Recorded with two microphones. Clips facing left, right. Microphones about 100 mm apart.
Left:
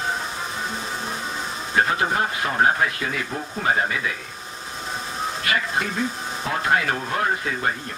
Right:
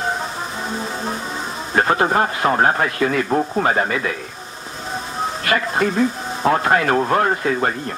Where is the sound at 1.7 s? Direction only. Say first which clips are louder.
Right 5 dB; 50° right (ahead or behind).